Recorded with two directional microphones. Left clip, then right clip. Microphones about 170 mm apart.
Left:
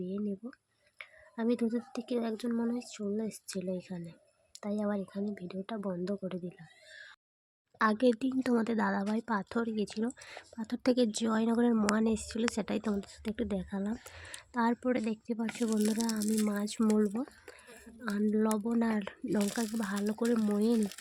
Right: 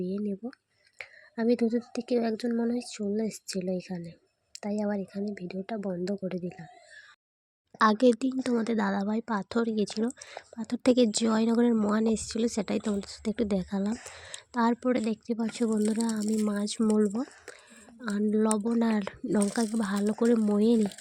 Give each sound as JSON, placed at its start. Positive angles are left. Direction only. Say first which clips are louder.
{"t": 0.0, "sound": "speech", "louder": "right 5 dB", "side_deg": -20}
{"t": 7.8, "sound": "speech", "louder": "right 5 dB", "side_deg": -25}